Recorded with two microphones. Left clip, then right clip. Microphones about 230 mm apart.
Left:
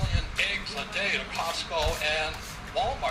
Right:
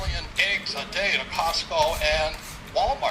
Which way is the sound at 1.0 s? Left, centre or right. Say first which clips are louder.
Right 5 dB; centre.